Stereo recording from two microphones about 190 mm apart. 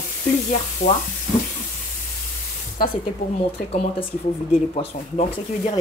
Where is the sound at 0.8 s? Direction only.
35° left (ahead or behind).